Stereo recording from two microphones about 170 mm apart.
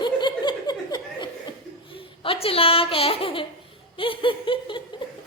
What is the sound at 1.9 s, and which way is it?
Speech, 30° left (ahead or behind).